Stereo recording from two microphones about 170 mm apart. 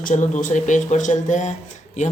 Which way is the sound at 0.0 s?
50° left (ahead or behind).